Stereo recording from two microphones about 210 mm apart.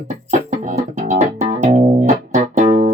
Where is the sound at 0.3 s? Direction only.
35° right (ahead or behind).